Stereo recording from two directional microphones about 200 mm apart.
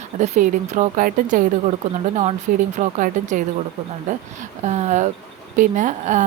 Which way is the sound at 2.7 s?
40° right (ahead or behind).